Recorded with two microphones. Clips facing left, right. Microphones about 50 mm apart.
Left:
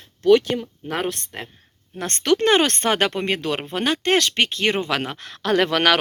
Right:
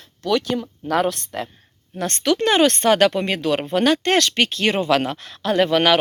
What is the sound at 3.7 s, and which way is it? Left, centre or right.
Speech, left.